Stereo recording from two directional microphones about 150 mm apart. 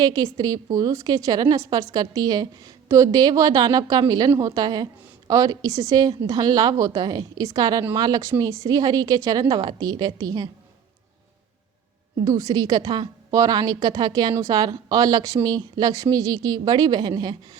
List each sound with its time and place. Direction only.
0.0 s a woman's voice: 25° right (ahead or behind)
12.2 s a woman's voice: 25° right (ahead or behind)